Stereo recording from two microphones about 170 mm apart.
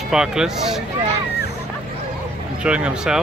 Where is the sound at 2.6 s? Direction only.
5° right (ahead or behind).